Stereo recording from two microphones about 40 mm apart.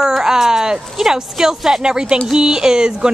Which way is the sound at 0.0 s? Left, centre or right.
Centre.